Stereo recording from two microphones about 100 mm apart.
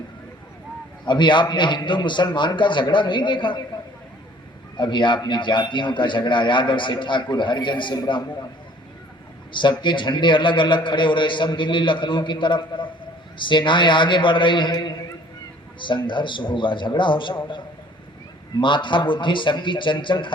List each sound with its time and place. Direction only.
1.0 s a man's voice: 50° left (ahead or behind)
4.8 s a man's voice: 50° left (ahead or behind)
9.5 s a man's voice: 50° left (ahead or behind)
18.6 s a man's voice: 55° left (ahead or behind)